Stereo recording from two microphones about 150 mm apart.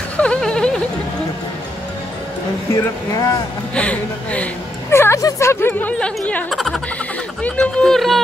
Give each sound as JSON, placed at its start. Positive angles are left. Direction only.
{"t": 0.2, "sound": "a sound", "side_deg": 5}
{"t": 2.7, "sound": "speech", "side_deg": 25}
{"t": 3.7, "sound": "speech", "side_deg": 10}